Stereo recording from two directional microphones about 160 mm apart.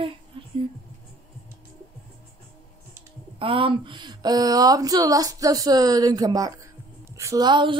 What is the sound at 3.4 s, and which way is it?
Speech, 35° right (ahead or behind).